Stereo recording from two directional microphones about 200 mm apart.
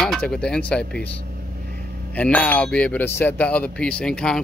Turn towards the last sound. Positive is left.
turn(degrees=5)  # may be behind; listen again after turning